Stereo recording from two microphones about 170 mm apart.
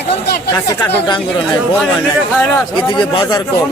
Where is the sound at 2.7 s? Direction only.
30° left (ahead or behind).